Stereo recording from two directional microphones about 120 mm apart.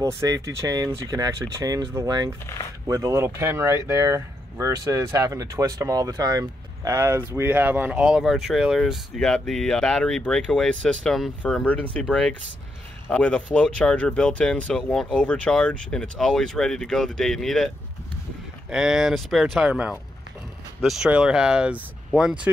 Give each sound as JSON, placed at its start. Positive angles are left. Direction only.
{"t": 0.0, "sound": "speech", "side_deg": -25}
{"t": 18.7, "sound": "speech", "side_deg": -5}